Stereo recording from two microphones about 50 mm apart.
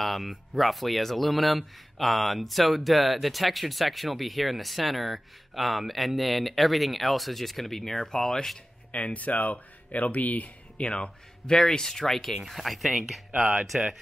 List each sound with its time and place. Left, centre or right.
0.0 s speech: centre
8.9 s speech: left
10.9 s speech: centre